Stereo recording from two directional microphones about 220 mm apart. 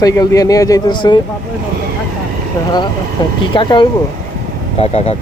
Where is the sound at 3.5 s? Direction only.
20° left (ahead or behind).